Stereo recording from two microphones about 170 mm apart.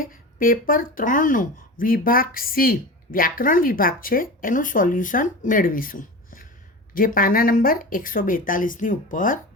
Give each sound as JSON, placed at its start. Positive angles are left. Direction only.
{"t": 0.0, "sound": "speech", "side_deg": 55}